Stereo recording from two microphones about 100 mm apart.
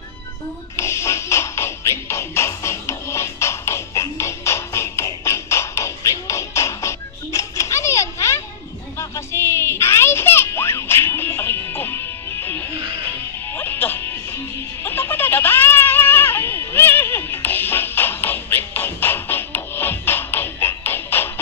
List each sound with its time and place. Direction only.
0.7 s music: 30° left (ahead or behind)
8.9 s a sound: 25° left (ahead or behind)
13.0 s music: 20° left (ahead or behind)